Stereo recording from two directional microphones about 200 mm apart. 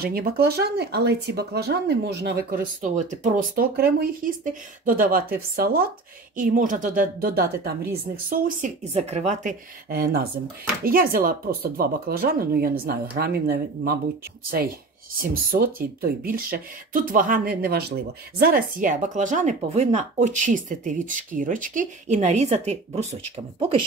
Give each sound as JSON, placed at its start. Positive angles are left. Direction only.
{"t": 0.0, "sound": "speech", "side_deg": -50}
{"t": 15.5, "sound": "speech", "side_deg": -50}